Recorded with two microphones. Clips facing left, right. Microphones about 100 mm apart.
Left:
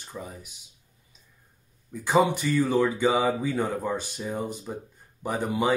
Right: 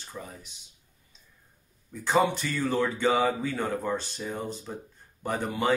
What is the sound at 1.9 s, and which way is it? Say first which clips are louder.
Speech: left 2 dB; 10° left (ahead or behind).